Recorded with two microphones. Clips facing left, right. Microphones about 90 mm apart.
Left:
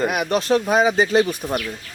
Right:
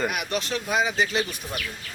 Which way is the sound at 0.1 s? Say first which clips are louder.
Left 9 dB; 40° left (ahead or behind).